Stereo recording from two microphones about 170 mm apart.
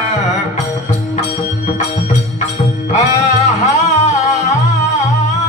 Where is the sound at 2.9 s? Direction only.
40° left (ahead or behind).